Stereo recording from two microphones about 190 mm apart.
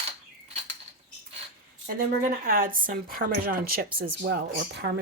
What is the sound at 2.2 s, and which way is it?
Speech, 45° right (ahead or behind).